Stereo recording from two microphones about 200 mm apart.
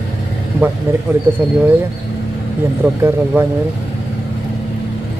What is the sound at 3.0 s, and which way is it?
Speech, 10° right (ahead or behind).